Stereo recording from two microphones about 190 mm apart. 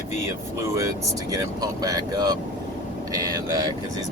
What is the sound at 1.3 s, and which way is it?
Speech, 15° right (ahead or behind).